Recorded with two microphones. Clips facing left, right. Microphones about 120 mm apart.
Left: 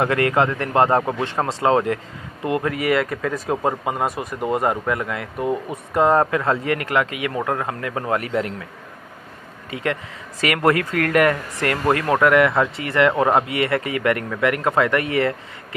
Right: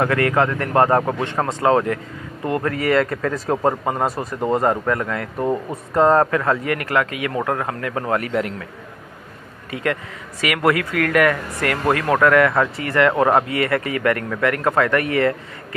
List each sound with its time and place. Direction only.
0.0 s speech: 20° left (ahead or behind)
2.5 s speech: 10° left (ahead or behind)
6.4 s speech: 25° left (ahead or behind)
9.7 s speech: 25° left (ahead or behind)